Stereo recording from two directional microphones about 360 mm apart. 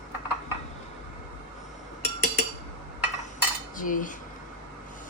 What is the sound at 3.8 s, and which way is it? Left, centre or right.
Cutlery, left.